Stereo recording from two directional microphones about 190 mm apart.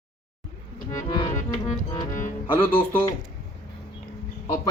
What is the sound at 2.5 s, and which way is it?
Speech, 10° left (ahead or behind).